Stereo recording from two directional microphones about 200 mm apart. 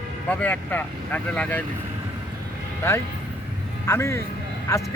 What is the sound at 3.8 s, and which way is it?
Speech, 15° left (ahead or behind).